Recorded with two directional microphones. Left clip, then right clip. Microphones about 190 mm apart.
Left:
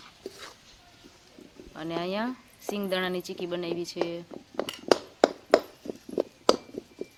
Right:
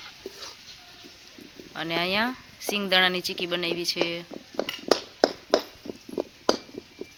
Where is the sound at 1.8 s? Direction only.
Centre (ahead or behind).